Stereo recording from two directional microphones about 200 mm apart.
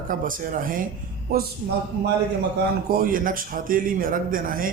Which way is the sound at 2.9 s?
45° right (ahead or behind).